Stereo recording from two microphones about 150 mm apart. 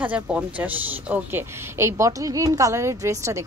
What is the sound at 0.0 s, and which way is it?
A woman's voice, 10° right (ahead or behind).